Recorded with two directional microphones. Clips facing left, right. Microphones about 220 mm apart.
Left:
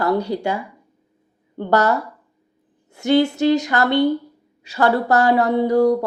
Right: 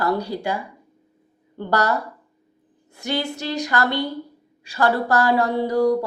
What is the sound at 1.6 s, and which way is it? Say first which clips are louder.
Speech: left 4 dB; 20° left (ahead or behind).